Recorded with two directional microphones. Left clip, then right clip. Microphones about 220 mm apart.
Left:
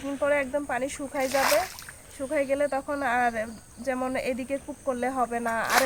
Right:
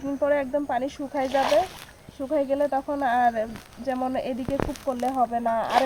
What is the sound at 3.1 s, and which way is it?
Speech, 20° left (ahead or behind).